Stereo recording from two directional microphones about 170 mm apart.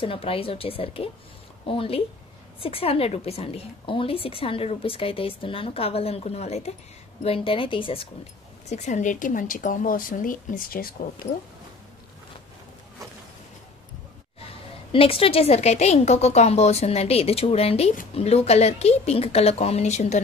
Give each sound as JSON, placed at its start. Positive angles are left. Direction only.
{"t": 0.0, "sound": "a woman's voice", "side_deg": 30}
{"t": 14.9, "sound": "a woman's voice", "side_deg": 35}